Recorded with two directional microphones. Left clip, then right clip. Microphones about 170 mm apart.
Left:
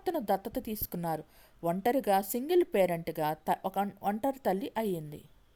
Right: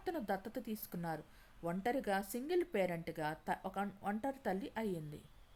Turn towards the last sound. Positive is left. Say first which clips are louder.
# left 8 dB
turn(degrees=35)  # may be behind; listen again after turning